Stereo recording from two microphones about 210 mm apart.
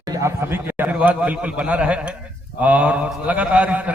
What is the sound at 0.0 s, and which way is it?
A man's voice, 15° right (ahead or behind).